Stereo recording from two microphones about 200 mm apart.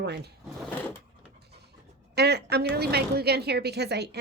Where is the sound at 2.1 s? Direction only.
55° right (ahead or behind).